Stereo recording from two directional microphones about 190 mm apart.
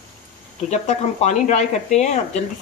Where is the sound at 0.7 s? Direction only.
35° left (ahead or behind).